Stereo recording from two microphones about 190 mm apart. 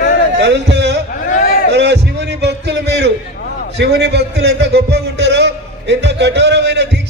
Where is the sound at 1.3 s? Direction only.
45° left (ahead or behind).